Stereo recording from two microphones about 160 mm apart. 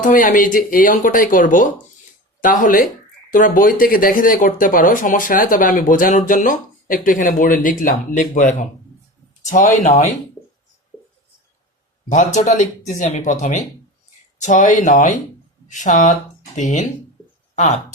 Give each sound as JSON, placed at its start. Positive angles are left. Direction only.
{"t": 0.0, "sound": "speech", "side_deg": 55}
{"t": 12.0, "sound": "speech", "side_deg": 50}
{"t": 17.5, "sound": "a sound", "side_deg": 50}